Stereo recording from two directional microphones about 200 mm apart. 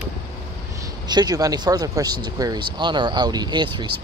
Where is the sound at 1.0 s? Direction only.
20° right (ahead or behind).